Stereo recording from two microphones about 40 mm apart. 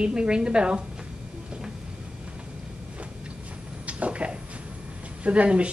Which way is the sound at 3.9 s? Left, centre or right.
Right.